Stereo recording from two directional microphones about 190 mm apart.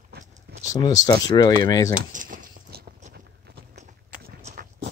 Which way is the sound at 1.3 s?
20° left (ahead or behind).